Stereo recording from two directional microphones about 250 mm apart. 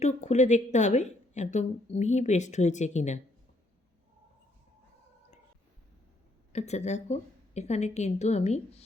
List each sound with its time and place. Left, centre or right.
0.0 s a woman's voice: left
6.5 s a woman's voice: left